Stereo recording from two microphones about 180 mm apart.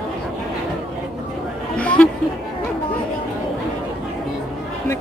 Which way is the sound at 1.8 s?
5° left (ahead or behind).